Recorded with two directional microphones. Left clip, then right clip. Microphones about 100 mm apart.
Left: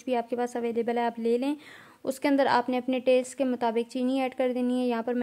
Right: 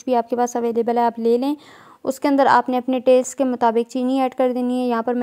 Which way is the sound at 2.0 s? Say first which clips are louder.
Right 8 dB; 40° right (ahead or behind).